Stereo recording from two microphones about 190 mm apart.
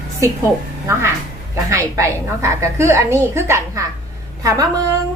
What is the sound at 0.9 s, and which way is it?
A woman's voice, 15° right (ahead or behind).